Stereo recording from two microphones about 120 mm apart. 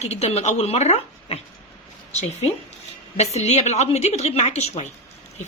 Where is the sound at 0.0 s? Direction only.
65° left (ahead or behind).